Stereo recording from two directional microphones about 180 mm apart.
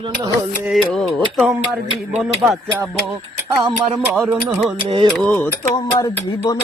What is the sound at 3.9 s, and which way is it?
Speech, centre (ahead or behind).